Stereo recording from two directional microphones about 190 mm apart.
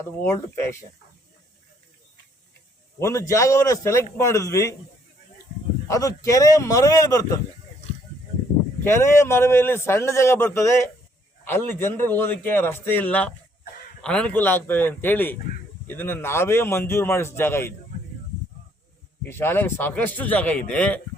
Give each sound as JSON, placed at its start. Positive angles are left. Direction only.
{"t": 0.0, "sound": "a man's voice", "side_deg": 15}
{"t": 3.0, "sound": "a man's voice", "side_deg": 15}
{"t": 5.9, "sound": "a man's voice", "side_deg": 15}
{"t": 8.8, "sound": "a man's voice", "side_deg": 15}
{"t": 19.3, "sound": "a man's voice", "side_deg": 10}